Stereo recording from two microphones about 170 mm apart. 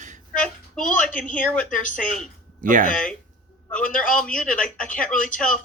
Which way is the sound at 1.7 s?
50° left (ahead or behind).